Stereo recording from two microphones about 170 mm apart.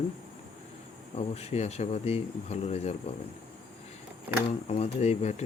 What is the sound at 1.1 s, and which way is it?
Speech, 40° left (ahead or behind).